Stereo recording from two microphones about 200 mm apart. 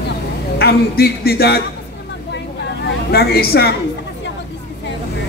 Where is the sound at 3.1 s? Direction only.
50° left (ahead or behind).